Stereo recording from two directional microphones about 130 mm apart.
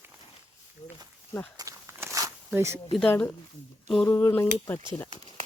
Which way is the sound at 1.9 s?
20° right (ahead or behind).